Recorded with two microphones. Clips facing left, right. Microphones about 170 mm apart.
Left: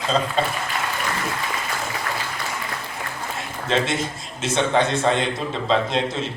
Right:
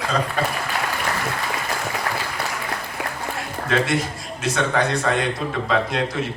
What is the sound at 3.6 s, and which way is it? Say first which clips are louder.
Speech: right 1 dB; 25° left (ahead or behind).